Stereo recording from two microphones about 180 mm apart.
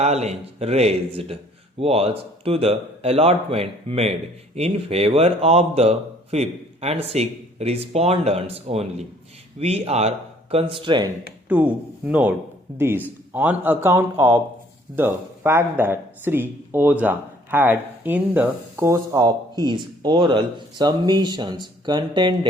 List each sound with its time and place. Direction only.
0.0 s speech: 35° right (ahead or behind)
11.4 s speech: 10° right (ahead or behind); by 22.4 s 25° right (ahead or behind)